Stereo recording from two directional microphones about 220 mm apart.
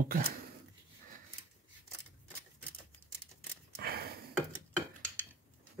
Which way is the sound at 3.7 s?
45° right (ahead or behind).